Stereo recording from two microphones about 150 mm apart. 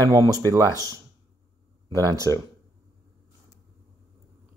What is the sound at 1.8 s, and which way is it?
Speech, 25° right (ahead or behind).